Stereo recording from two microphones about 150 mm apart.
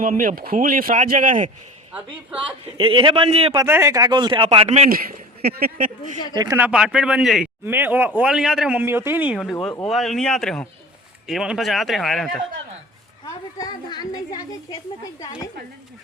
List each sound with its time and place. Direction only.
0.0 s speech: 65° right (ahead or behind)
2.7 s a man's voice: 35° right (ahead or behind)
3.6 s speech: 20° right (ahead or behind); by 4.9 s 45° right (ahead or behind)
4.9 s speech: 75° right (ahead or behind)
6.3 s speech: 25° right (ahead or behind)
6.6 s speech: 5° right (ahead or behind)
13.2 s a woman's voice: 25° left (ahead or behind)